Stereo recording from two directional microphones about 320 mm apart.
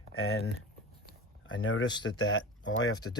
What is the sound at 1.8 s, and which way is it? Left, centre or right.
Speech, centre.